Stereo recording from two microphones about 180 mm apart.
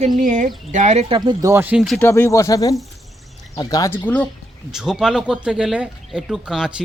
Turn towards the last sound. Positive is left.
turn(degrees=-5)  # may be behind; listen again after turning